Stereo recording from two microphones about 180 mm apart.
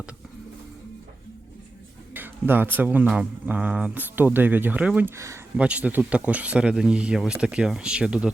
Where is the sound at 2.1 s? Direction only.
10° right (ahead or behind).